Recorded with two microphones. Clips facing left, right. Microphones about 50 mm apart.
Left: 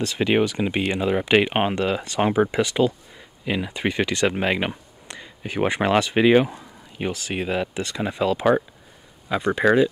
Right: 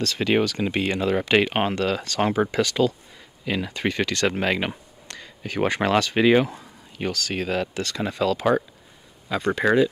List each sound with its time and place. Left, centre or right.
0.0 s speech: centre
9.6 s speech: centre